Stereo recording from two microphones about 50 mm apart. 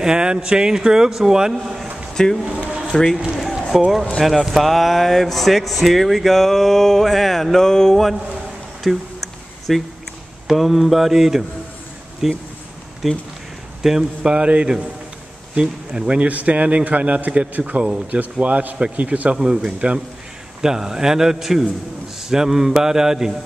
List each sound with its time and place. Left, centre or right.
0.0 s a man's voice: centre
2.1 s a man's voice: centre
3.2 s speech: centre
13.8 s a man's voice: centre
19.3 s a man's voice: centre